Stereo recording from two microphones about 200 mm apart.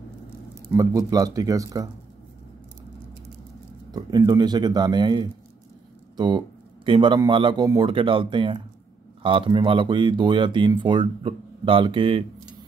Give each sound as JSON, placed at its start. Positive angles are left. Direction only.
{"t": 0.7, "sound": "speech", "side_deg": -15}
{"t": 3.9, "sound": "speech", "side_deg": -20}